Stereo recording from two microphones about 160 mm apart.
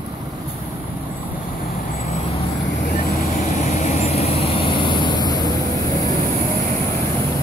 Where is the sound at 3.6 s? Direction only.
50° left (ahead or behind); by 5.5 s 25° left (ahead or behind).